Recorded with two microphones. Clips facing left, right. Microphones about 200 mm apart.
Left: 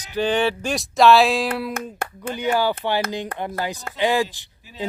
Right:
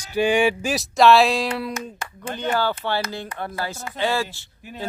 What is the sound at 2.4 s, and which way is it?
Speech, 15° left (ahead or behind).